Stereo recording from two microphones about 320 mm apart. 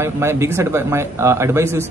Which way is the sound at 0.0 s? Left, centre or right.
Centre.